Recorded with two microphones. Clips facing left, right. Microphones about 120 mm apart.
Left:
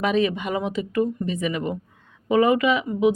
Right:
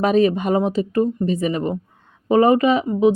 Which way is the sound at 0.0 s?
40° right (ahead or behind).